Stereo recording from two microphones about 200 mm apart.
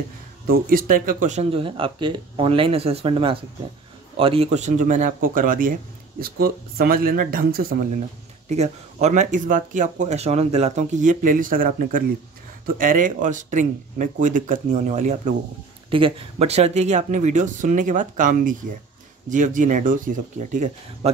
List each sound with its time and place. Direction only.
0.5 s speech: 45° right (ahead or behind)
8.5 s speech: 35° right (ahead or behind)